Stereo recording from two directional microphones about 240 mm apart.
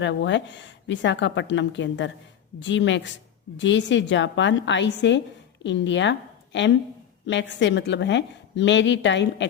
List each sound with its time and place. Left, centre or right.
0.0 s a woman's voice: left